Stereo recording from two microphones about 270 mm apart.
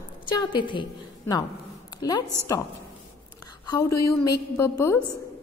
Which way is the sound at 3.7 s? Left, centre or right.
Centre.